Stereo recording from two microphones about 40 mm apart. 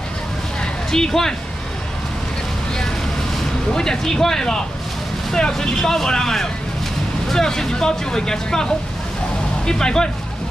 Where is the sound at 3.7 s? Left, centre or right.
Centre.